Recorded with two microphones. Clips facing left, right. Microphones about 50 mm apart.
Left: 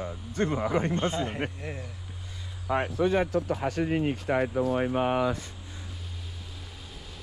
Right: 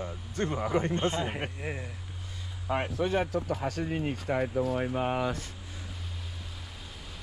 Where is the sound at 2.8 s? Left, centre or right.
Left.